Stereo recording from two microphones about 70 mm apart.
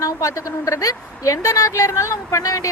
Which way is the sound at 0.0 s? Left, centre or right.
Left.